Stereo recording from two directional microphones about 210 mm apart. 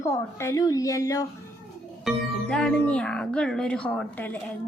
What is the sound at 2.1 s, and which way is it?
Speech, 5° left (ahead or behind).